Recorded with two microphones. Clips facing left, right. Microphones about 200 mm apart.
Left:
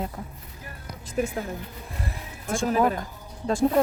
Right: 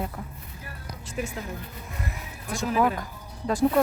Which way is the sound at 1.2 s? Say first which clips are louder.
Left 6 dB; 45° left (ahead or behind).